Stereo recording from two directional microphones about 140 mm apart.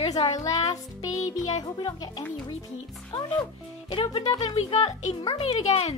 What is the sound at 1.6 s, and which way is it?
Speech, 30° left (ahead or behind).